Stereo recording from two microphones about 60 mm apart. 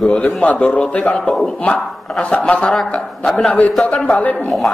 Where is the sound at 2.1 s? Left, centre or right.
Centre.